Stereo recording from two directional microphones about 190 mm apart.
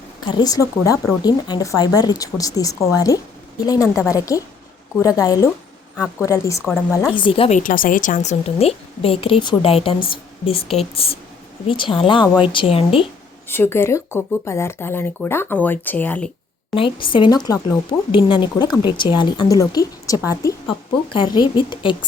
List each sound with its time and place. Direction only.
0.3 s speech: 20° left (ahead or behind)
7.1 s speech: 25° left (ahead or behind)
7.6 s a woman's voice: 45° left (ahead or behind); by 13.1 s 30° left (ahead or behind)
13.5 s speech: 10° left (ahead or behind)
16.7 s speech: 25° left (ahead or behind)